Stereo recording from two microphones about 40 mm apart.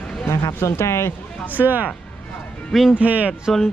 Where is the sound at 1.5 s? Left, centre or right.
Right.